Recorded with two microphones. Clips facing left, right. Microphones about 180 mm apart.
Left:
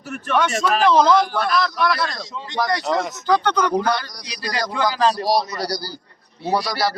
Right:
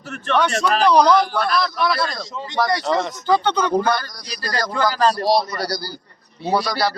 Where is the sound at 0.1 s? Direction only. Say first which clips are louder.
Right 1 dB; 10° left (ahead or behind).